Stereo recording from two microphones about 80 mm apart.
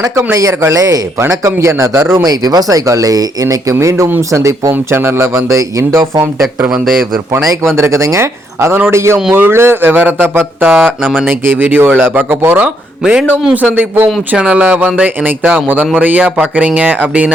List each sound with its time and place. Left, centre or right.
0.3 s speech: right
7.8 s speech: right
12.6 s speech: centre